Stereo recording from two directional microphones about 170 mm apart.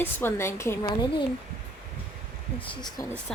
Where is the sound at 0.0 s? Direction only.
15° left (ahead or behind).